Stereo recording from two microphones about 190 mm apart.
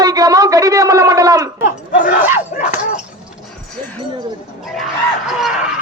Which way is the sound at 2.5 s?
45° left (ahead or behind).